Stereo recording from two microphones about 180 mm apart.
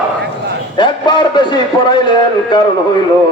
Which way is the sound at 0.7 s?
25° left (ahead or behind).